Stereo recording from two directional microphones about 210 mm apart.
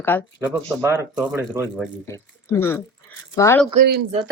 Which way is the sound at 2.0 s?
15° left (ahead or behind).